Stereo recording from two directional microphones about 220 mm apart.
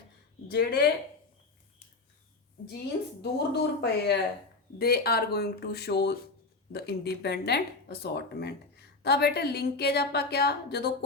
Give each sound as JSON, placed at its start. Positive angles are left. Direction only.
{"t": 0.5, "sound": "a woman's voice", "side_deg": 45}
{"t": 3.2, "sound": "a woman's voice", "side_deg": 45}